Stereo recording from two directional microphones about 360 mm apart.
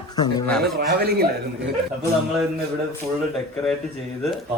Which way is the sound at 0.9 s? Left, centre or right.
Right.